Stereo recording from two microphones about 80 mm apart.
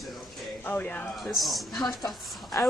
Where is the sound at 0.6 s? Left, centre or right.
Left.